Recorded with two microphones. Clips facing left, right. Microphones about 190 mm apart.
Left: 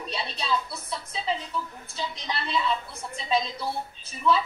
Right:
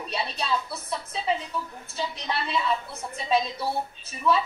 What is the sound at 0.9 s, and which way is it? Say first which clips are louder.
A woman's voice: right 2 dB; 5° right (ahead or behind).